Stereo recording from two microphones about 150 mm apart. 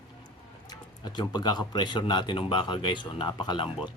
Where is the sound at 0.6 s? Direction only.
30° left (ahead or behind).